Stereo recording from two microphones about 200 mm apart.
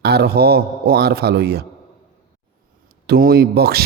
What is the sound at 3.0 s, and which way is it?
Speech, 50° right (ahead or behind).